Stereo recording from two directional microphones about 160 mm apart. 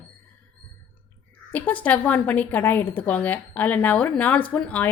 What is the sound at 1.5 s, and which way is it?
A woman's voice, 10° left (ahead or behind).